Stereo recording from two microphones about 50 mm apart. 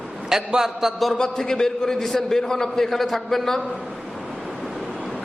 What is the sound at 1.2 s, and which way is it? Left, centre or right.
A man's voice, centre.